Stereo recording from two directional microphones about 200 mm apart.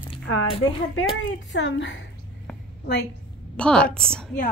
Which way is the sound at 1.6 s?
65° left (ahead or behind).